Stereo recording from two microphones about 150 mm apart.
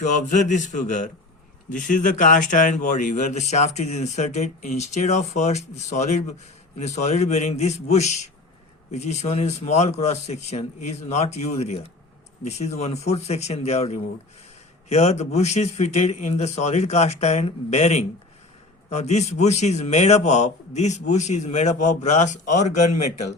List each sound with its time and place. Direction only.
0.0 s speech: 55° left (ahead or behind)